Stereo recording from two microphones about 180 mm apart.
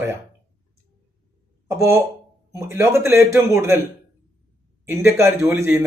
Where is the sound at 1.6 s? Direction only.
15° right (ahead or behind).